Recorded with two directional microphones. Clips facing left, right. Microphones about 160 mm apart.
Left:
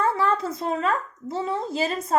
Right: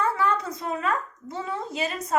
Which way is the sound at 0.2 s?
30° left (ahead or behind).